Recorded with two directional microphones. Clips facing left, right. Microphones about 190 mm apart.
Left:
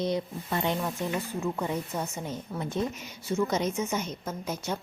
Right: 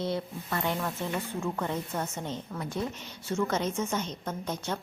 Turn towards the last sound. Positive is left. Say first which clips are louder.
# left 1 dB
turn(degrees=10)  # may be behind; listen again after turning